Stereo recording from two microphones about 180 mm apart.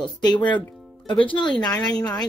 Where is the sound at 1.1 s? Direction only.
25° left (ahead or behind).